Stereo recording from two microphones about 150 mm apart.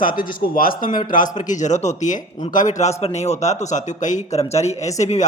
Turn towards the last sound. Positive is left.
turn(degrees=50)  # may be behind; listen again after turning